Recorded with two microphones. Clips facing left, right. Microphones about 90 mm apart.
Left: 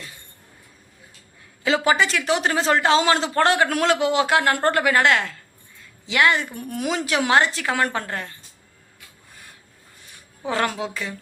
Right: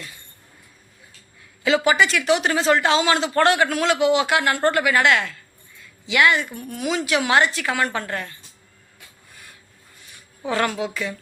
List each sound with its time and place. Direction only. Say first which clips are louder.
1.6 s speech: right 1 dB; 35° left (ahead or behind)
3.7 s a man's voice: left 1 dB; 45° left (ahead or behind)
3.9 s speech: right 1 dB; 35° left (ahead or behind)
10.4 s speech: right 1 dB; 25° left (ahead or behind)